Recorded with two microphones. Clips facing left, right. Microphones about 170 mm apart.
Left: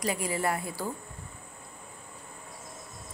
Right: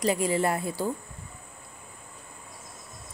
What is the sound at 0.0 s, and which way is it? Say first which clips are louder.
Speech: right 5 dB; 25° right (ahead or behind).